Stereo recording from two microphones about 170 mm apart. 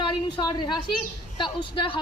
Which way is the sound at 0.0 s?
25° left (ahead or behind).